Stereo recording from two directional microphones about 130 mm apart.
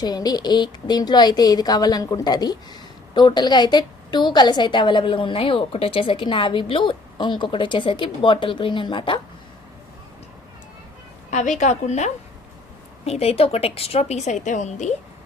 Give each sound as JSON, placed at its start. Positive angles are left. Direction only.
{"t": 0.0, "sound": "a woman's voice", "side_deg": 30}
{"t": 11.3, "sound": "a woman's voice", "side_deg": 65}